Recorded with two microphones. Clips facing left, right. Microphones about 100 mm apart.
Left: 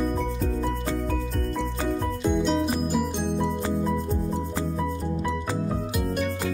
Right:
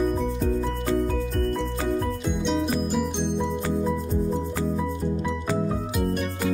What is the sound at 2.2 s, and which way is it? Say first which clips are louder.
Music: left 2 dB; 5° left (ahead or behind).